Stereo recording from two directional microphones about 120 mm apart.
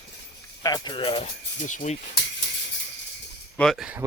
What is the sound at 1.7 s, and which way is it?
Speech, 90° left.